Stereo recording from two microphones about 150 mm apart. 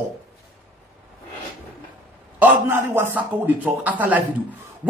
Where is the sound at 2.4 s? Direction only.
15° right (ahead or behind).